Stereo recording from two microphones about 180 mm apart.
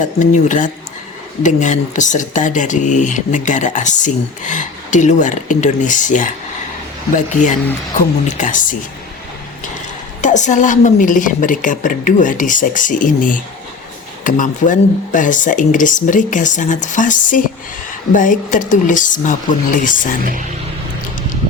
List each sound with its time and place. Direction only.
0.0 s speech: 45° left (ahead or behind)
10.2 s speech: 45° left (ahead or behind)